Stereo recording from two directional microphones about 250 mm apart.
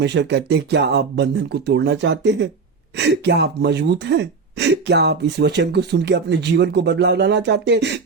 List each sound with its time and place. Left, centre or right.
0.0 s speech: right